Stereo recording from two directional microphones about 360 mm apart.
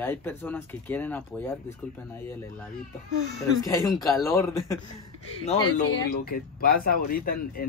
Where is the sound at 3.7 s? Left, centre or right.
Centre.